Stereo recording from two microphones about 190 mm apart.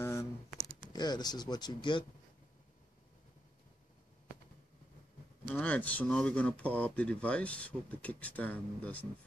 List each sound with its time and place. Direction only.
0.0 s a sound: 15° left (ahead or behind)
0.9 s speech: 20° left (ahead or behind)
5.4 s speech: 5° left (ahead or behind)